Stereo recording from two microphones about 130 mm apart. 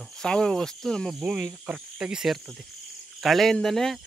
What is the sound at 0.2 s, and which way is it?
Speech, 5° left (ahead or behind).